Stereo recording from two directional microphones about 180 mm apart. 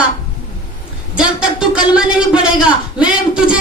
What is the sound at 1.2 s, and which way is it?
A man's voice, 5° right (ahead or behind).